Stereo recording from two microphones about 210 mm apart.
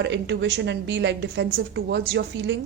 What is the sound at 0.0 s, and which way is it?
A woman's voice, 55° right (ahead or behind).